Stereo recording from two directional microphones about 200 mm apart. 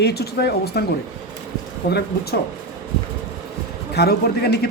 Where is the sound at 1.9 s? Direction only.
55° left (ahead or behind).